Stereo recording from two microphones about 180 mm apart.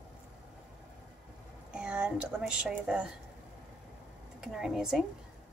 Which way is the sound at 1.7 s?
5° right (ahead or behind).